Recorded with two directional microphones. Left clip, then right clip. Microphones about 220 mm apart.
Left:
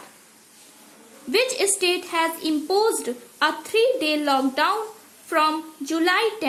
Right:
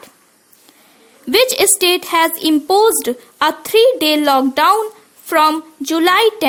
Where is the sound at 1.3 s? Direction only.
50° right (ahead or behind).